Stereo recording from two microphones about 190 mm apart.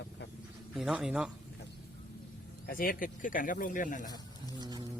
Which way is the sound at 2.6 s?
50° left (ahead or behind).